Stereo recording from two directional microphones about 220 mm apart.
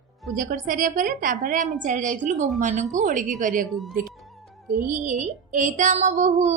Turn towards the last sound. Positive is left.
turn(degrees=-30)  # may be behind; listen again after turning